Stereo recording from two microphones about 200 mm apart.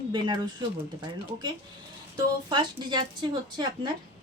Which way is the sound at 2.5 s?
20° right (ahead or behind).